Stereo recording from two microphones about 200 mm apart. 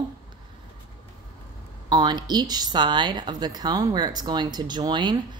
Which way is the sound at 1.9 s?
20° right (ahead or behind).